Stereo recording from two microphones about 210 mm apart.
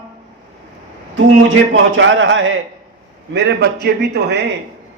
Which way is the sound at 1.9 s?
60° right (ahead or behind).